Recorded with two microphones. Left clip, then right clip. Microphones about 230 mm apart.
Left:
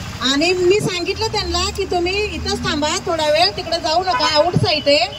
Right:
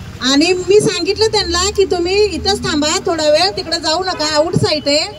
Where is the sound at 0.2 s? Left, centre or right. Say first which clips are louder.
Right 2 dB; right.